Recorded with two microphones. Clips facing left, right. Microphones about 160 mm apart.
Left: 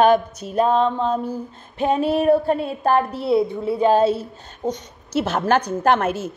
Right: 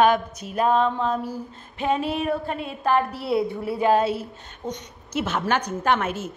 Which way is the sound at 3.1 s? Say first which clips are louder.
Left 5 dB; centre (ahead or behind).